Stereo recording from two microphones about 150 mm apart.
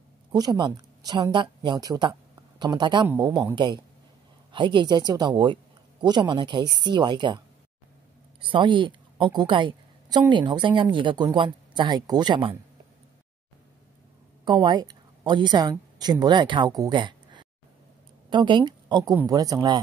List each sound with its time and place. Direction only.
0.3 s a woman's voice: 30° right (ahead or behind)
14.4 s a woman's voice: 30° right (ahead or behind)